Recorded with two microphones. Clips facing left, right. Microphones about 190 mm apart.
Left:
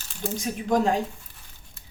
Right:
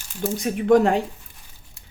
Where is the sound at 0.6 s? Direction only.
60° right (ahead or behind).